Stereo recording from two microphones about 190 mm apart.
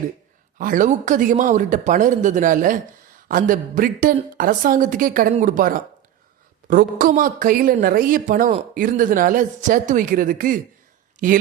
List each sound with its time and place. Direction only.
0.6 s speech: 45° right (ahead or behind)